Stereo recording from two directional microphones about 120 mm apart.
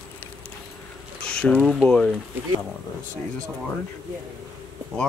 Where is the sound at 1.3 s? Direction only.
5° left (ahead or behind).